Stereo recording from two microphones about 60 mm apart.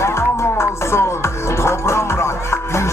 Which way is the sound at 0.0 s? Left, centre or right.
Left.